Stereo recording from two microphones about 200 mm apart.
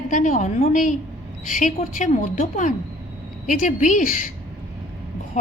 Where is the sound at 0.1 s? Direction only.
40° left (ahead or behind).